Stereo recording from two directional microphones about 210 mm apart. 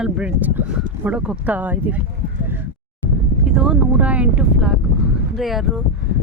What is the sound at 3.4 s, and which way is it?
Speech, 5° right (ahead or behind).